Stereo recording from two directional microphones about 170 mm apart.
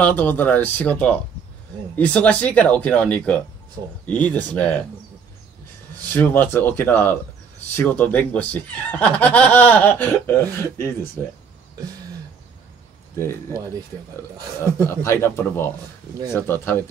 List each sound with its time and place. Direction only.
0.0 s speech: 10° left (ahead or behind)
6.1 s speech: 10° left (ahead or behind)
13.1 s speech: 15° left (ahead or behind)
14.6 s speech: 15° left (ahead or behind)